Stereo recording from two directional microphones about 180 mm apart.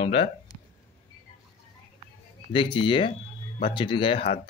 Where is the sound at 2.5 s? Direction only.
30° left (ahead or behind).